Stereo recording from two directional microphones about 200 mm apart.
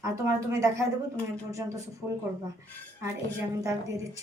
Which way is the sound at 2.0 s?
10° right (ahead or behind).